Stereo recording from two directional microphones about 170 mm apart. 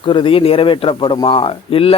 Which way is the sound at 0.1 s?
30° left (ahead or behind).